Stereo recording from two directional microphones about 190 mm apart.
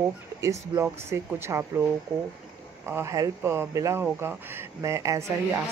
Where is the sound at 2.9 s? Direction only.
15° right (ahead or behind).